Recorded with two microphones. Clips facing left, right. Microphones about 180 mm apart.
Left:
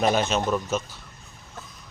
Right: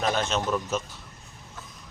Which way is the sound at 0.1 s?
5° left (ahead or behind).